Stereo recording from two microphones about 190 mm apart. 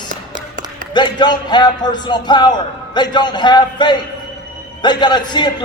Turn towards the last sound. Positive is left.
turn(degrees=25)  # may be behind; listen again after turning